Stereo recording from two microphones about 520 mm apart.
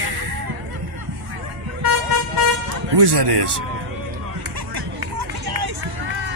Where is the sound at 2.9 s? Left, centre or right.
Right.